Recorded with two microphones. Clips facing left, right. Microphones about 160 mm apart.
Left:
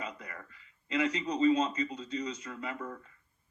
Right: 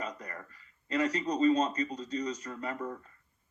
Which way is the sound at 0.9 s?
35° right (ahead or behind).